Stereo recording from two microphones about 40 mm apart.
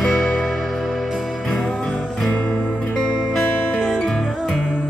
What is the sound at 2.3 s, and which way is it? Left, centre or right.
Music, left.